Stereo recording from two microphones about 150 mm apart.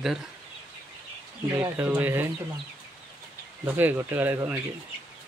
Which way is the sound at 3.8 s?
15° right (ahead or behind).